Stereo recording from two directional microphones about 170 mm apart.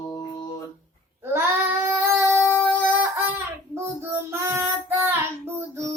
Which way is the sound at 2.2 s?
15° left (ahead or behind).